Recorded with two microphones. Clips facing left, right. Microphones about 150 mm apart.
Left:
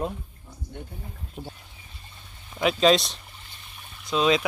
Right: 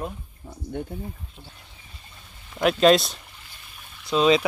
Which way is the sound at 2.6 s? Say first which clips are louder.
Right 3 dB; centre (ahead or behind).